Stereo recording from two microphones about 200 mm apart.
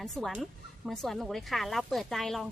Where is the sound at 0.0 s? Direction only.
Centre (ahead or behind).